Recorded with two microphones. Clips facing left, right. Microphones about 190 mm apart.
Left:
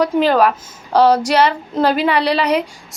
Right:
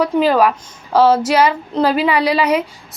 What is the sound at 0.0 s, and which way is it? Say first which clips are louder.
A woman's voice: even; 5° right (ahead or behind).